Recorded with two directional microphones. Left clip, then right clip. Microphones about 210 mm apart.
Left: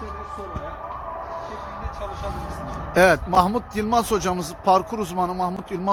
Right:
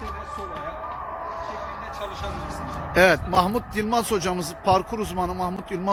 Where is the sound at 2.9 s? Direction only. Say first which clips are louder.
Left 1 dB; 10° left (ahead or behind).